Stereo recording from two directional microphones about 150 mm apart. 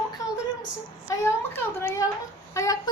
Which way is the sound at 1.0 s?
20° left (ahead or behind).